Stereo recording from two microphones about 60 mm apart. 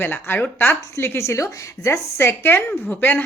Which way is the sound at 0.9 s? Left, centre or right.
Left.